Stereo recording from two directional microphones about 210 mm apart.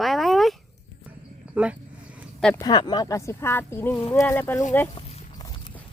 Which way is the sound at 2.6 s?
20° left (ahead or behind).